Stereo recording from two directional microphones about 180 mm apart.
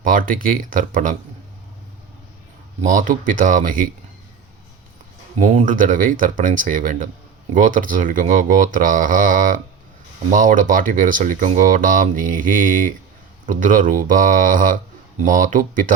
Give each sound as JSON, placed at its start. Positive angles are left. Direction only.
{"t": 0.0, "sound": "speech", "side_deg": -50}
{"t": 2.8, "sound": "speech", "side_deg": -45}
{"t": 5.4, "sound": "speech", "side_deg": -45}